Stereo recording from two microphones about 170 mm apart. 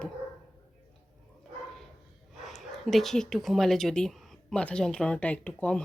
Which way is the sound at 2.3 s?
Centre (ahead or behind).